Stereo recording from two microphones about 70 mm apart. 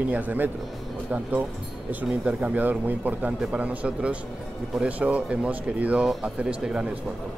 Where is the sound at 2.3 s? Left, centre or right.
Centre.